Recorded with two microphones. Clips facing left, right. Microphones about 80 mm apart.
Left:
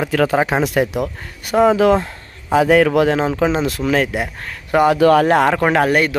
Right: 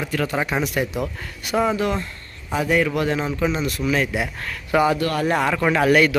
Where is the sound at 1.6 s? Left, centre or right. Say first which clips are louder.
Left 9 dB; left.